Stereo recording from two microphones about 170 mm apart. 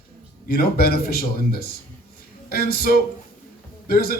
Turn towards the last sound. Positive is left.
turn(degrees=60)  # may be behind; listen again after turning